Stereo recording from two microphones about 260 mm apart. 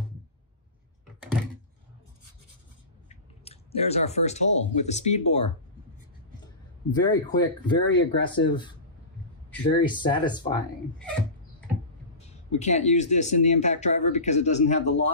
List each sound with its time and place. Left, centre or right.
3.1 s speech: left
6.9 s speech: centre
12.2 s speech: left